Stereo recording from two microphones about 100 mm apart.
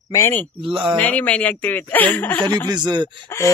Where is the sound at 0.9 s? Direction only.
15° left (ahead or behind).